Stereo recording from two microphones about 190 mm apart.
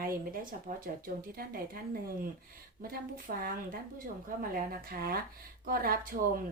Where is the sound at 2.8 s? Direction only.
50° right (ahead or behind).